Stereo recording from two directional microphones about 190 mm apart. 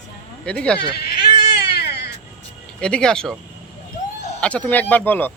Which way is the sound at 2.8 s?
5° left (ahead or behind).